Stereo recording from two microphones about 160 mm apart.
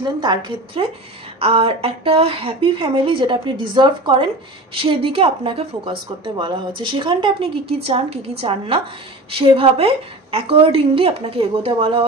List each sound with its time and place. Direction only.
0.0 s a woman's voice: 30° right (ahead or behind)